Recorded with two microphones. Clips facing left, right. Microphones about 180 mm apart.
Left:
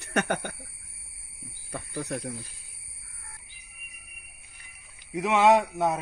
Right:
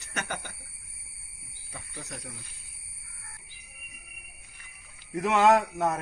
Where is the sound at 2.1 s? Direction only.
60° left (ahead or behind).